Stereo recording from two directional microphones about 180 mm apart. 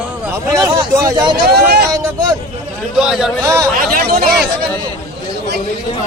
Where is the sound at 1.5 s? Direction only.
65° right (ahead or behind).